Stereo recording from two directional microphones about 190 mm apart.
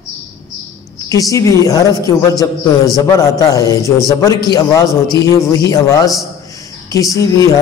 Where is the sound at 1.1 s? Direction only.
20° left (ahead or behind).